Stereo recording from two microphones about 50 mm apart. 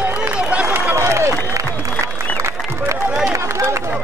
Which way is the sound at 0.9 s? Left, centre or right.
Right.